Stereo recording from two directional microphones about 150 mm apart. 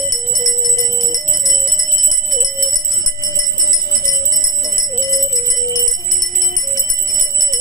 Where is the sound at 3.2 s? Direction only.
25° left (ahead or behind).